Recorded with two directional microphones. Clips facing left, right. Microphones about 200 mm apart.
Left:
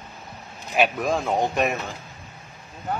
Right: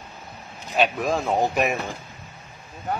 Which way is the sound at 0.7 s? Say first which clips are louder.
Even; 5° left (ahead or behind).